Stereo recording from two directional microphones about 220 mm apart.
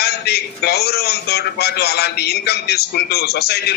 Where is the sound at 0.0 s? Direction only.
45° left (ahead or behind).